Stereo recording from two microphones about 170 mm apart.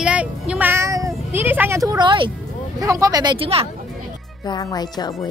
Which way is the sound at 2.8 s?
20° right (ahead or behind).